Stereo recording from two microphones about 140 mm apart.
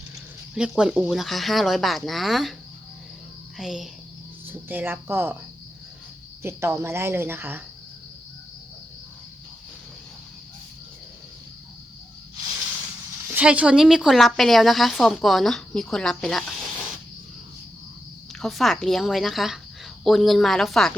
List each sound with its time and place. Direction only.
0.5 s a woman's voice: 5° right (ahead or behind)
3.6 s a woman's voice: 5° right (ahead or behind)
4.4 s speech: 15° right (ahead or behind)
6.4 s speech: 20° right (ahead or behind)
13.3 s a woman's voice: 10° right (ahead or behind)
18.4 s a woman's voice: centre (ahead or behind)